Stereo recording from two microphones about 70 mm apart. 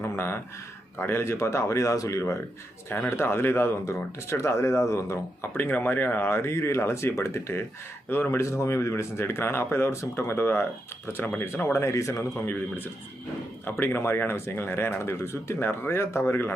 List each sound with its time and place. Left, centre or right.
0.0 s a sound: left
0.9 s speech: left
3.1 s speech: left
5.5 s speech: left
8.4 s speech: left
13.7 s speech: left